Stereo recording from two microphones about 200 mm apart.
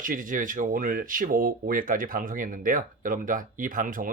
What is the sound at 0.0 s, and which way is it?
Speech, 40° right (ahead or behind).